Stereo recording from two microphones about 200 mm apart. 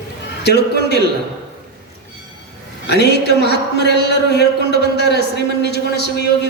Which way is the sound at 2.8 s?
55° left (ahead or behind).